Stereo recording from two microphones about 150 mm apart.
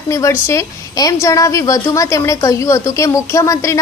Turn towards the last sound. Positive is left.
turn(degrees=20)  # may be behind; listen again after turning